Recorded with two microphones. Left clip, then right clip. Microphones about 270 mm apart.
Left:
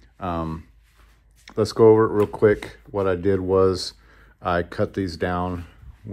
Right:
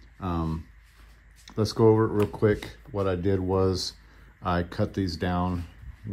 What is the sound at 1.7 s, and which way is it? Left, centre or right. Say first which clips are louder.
Speech: left 7 dB; left.